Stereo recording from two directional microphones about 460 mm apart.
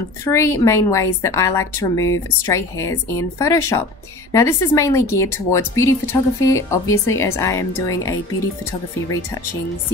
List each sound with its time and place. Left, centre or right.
0.2 s a woman's voice: centre